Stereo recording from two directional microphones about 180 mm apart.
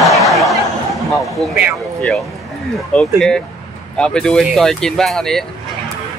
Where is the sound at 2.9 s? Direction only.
5° left (ahead or behind).